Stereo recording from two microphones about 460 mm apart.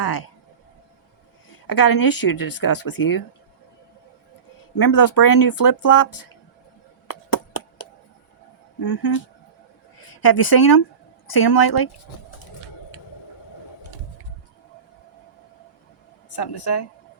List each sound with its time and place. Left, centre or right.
0.0 s speech: left
1.5 s speech: left
4.7 s speech: left
7.1 s a sound: left
8.8 s speech: left
16.3 s speech: left